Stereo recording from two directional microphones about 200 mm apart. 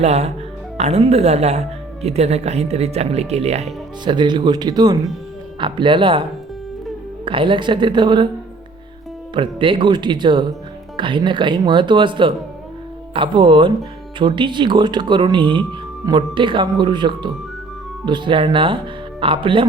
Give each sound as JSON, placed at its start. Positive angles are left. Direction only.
{"t": 0.0, "sound": "speech", "side_deg": -35}
{"t": 7.3, "sound": "speech", "side_deg": -25}
{"t": 9.3, "sound": "speech", "side_deg": -25}